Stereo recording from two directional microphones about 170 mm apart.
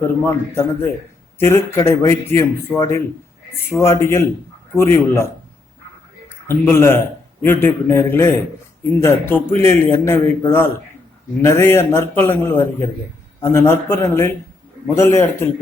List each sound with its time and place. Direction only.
0.3 s a man's voice: 15° left (ahead or behind)